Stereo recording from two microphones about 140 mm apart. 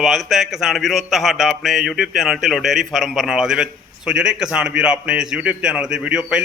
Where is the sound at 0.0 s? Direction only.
Centre (ahead or behind).